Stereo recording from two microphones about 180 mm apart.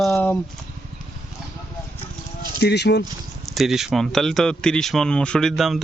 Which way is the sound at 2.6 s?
65° left (ahead or behind).